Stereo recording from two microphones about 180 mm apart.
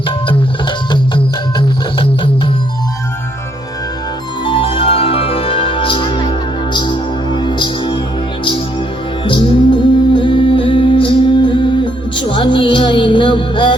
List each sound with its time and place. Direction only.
0.9 s music: 25° left (ahead or behind)
4.4 s music: 30° left (ahead or behind)
9.2 s music: 30° left (ahead or behind)